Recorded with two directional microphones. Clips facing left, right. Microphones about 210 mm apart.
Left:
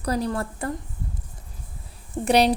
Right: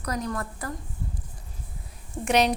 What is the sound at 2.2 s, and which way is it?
Speech, 35° left (ahead or behind).